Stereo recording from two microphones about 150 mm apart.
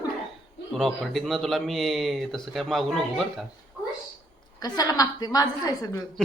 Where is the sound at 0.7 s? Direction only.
Centre (ahead or behind).